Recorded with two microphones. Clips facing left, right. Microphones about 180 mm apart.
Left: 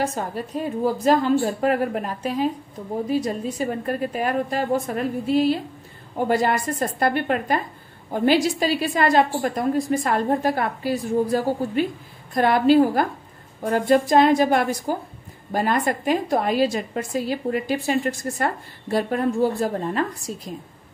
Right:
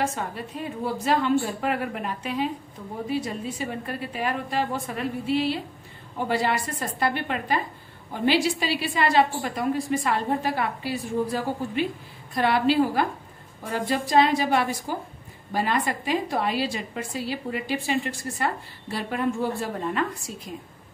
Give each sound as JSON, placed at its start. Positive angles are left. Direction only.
{"t": 0.0, "sound": "a woman's voice", "side_deg": 40}